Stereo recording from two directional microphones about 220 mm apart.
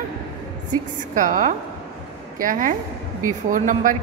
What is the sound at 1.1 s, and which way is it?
A woman's voice, 35° right (ahead or behind).